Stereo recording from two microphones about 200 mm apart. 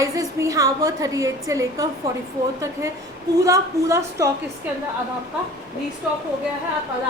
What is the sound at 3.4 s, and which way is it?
Speech, 15° right (ahead or behind).